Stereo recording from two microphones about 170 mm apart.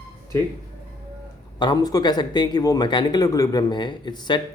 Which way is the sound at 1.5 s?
25° left (ahead or behind).